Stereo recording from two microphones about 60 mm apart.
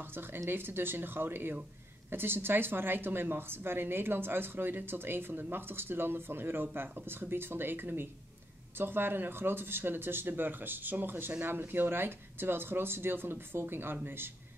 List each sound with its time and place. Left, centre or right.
0.5 s a woman's voice: right